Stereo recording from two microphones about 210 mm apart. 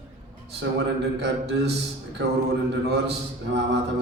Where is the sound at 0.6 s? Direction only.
55° right (ahead or behind).